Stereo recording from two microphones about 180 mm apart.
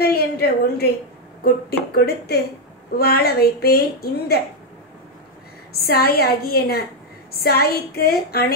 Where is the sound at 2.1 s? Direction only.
60° left (ahead or behind).